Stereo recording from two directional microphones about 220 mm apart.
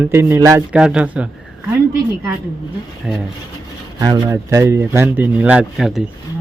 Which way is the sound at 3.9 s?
15° right (ahead or behind).